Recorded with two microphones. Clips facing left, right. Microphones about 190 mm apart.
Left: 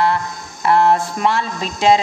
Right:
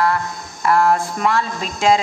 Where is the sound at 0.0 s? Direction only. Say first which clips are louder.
Left 1 dB; 25° left (ahead or behind).